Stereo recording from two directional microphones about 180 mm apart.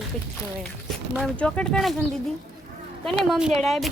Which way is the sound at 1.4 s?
5° left (ahead or behind).